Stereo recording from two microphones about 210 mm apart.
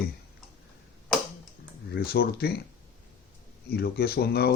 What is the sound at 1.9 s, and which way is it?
Speech, 45° left (ahead or behind).